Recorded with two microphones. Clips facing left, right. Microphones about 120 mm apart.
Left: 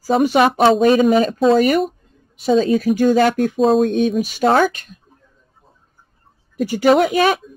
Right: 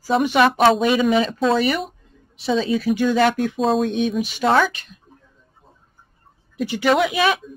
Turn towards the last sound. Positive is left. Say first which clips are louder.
# left 4 dB
turn(degrees=45)  # may be behind; listen again after turning